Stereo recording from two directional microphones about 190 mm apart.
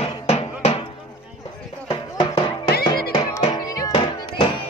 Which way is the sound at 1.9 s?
25° left (ahead or behind).